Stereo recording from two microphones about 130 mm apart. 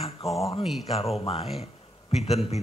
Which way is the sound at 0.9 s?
50° left (ahead or behind).